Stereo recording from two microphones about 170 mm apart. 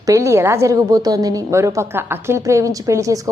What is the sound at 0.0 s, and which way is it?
A woman's voice, 20° right (ahead or behind).